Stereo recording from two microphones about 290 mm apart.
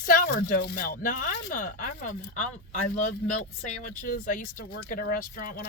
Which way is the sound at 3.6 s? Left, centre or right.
Left.